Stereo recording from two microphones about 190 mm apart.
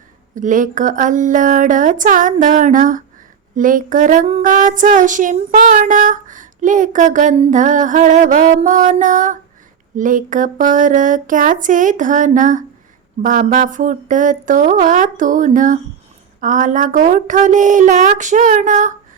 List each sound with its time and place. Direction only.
0.3 s child singing: 45° right (ahead or behind)
16.4 s a woman's voice: 45° right (ahead or behind)